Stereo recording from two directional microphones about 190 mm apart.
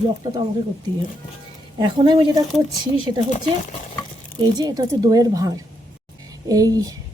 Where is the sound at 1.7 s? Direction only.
20° right (ahead or behind).